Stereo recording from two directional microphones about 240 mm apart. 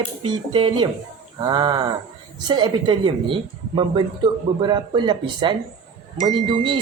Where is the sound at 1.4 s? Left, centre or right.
Centre.